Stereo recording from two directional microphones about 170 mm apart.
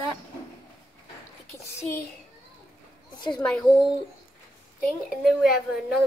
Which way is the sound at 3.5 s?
5° left (ahead or behind).